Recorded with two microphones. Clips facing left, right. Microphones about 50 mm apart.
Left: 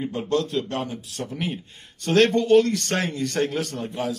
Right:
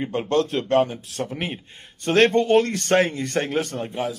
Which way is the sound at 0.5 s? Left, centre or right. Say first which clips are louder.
Right 7 dB; right.